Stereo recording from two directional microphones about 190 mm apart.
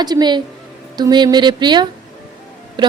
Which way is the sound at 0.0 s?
20° right (ahead or behind).